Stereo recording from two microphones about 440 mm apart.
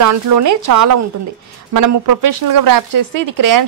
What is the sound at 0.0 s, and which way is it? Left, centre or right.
Speech, right.